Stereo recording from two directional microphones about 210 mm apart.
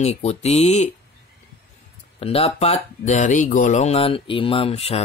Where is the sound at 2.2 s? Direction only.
30° left (ahead or behind).